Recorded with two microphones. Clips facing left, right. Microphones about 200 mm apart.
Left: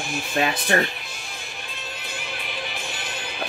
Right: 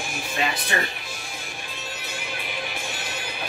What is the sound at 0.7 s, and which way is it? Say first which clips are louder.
Speech: left 7 dB; 55° left (ahead or behind).